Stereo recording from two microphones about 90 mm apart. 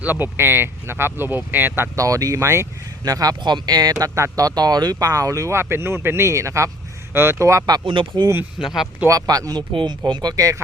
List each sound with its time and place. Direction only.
0.0 s speech: 20° right (ahead or behind)
2.0 s speech: 40° right (ahead or behind)
3.0 s speech: 40° right (ahead or behind)
7.9 s speech: 65° right (ahead or behind)
8.5 s speech: 5° right (ahead or behind)
9.0 s speech: 40° right (ahead or behind)
9.7 s speech: 55° right (ahead or behind); by 10.6 s 40° right (ahead or behind)